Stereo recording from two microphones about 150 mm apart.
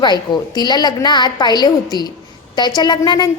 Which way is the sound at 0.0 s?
30° left (ahead or behind).